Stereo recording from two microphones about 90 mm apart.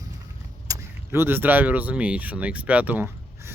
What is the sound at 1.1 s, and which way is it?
Speech, 25° right (ahead or behind).